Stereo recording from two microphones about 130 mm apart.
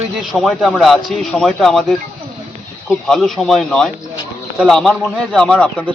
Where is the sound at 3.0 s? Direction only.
5° left (ahead or behind).